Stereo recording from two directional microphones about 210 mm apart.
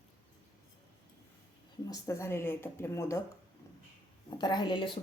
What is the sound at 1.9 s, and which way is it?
Speech, 15° left (ahead or behind).